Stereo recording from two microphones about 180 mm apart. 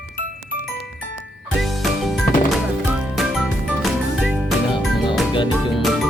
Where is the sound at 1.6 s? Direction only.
Centre (ahead or behind).